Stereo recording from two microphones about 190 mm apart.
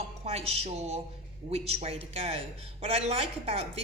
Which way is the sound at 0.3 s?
30° right (ahead or behind).